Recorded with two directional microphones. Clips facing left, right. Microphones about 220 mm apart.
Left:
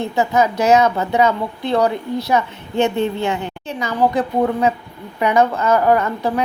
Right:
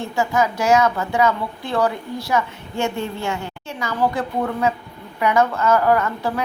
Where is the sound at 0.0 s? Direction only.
20° left (ahead or behind).